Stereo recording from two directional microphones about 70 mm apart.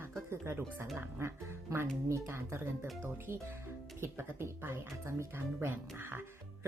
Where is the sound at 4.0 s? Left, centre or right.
Right.